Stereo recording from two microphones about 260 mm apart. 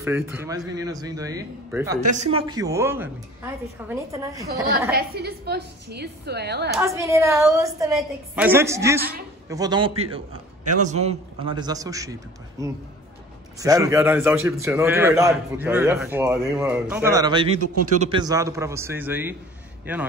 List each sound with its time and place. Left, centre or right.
0.0 s a man's voice: centre
2.1 s a man's voice: right
4.9 s a woman's voice: right
6.8 s a man's voice: centre